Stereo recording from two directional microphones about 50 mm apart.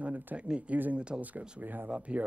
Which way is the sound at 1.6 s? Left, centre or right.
Right.